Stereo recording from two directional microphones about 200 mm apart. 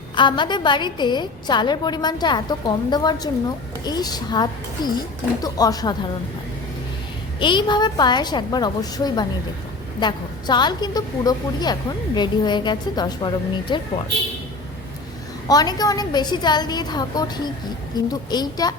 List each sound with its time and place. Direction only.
0.2 s a woman's voice: 25° left (ahead or behind)
7.3 s a woman's voice: 25° left (ahead or behind)
15.4 s a woman's voice: 20° left (ahead or behind)